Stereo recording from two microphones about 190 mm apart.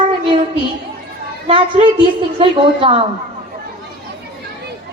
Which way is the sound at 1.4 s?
30° right (ahead or behind).